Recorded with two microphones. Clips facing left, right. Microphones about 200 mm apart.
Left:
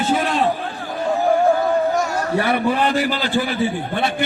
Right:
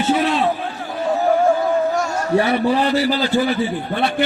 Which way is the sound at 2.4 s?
55° left (ahead or behind).